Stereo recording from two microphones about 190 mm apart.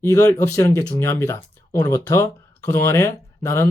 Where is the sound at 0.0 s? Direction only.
15° left (ahead or behind).